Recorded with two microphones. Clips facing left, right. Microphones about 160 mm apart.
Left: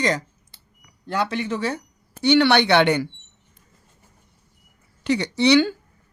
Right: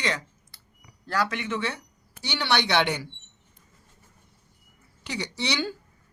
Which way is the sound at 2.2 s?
60° left (ahead or behind).